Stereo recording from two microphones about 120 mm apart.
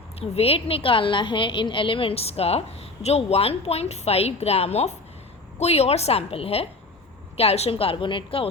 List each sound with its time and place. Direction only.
0.2 s a woman's voice: 55° left (ahead or behind)